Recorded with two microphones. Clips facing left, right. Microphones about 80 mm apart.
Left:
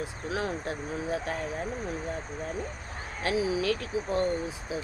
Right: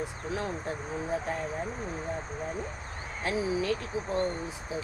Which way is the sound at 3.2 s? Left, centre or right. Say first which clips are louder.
Left 2 dB; left.